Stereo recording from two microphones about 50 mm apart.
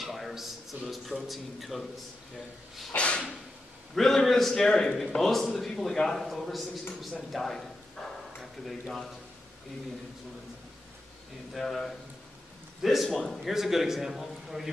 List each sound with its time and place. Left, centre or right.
0.0 s a sound: centre
1.2 s a man's voice: centre
3.0 s a sound: left
3.9 s a man's voice: centre
5.2 s a man's voice: centre
8.0 s bow-wow: centre
8.4 s speech: centre
11.5 s a man's voice: centre
13.1 s a man's voice: centre
13.5 s a man's voice: centre